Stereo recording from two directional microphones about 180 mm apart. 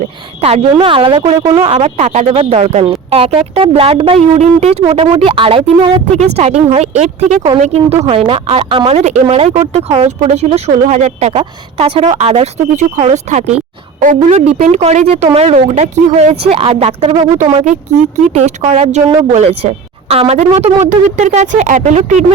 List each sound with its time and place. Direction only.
0.4 s speech: 30° right (ahead or behind)
14.6 s speech: 40° right (ahead or behind)